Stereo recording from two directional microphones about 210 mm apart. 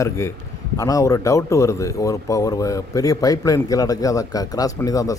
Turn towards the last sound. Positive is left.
turn(degrees=15)  # may be behind; listen again after turning